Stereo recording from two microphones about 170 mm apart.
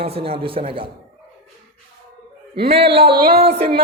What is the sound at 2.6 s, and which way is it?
A man's voice, 35° right (ahead or behind).